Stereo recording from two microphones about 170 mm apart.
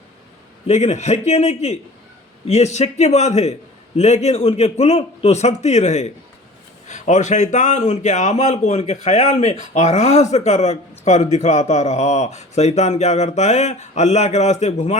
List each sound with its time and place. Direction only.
0.7 s a man's voice: 40° left (ahead or behind)